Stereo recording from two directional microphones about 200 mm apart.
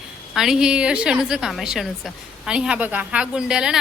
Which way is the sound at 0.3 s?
Centre (ahead or behind).